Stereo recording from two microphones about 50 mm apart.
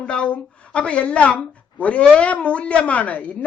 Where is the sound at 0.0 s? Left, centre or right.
Left.